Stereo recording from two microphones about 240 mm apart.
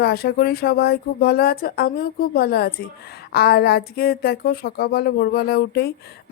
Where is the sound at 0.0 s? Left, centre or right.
Left.